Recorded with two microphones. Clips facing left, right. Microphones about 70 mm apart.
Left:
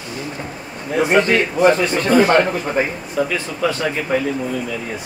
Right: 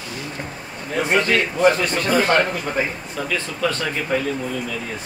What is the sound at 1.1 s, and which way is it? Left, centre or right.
Speech, centre.